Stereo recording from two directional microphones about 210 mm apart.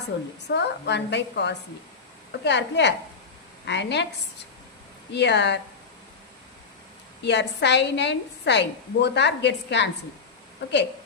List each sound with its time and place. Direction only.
0.4 s a woman's voice: 55° left (ahead or behind)
5.1 s a woman's voice: 55° left (ahead or behind)
7.3 s a woman's voice: 55° left (ahead or behind)